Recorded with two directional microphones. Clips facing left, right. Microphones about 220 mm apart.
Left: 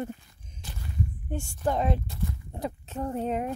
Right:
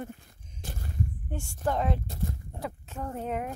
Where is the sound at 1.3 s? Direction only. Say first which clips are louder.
Left 2 dB; 15° left (ahead or behind).